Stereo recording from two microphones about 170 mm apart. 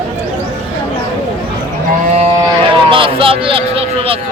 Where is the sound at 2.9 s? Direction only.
30° right (ahead or behind).